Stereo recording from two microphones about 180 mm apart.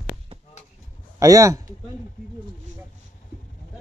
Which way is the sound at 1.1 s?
20° right (ahead or behind).